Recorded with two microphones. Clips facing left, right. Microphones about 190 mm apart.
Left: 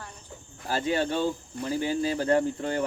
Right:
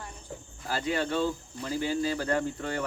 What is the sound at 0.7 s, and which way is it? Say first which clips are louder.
Speech: left 3 dB; 25° left (ahead or behind).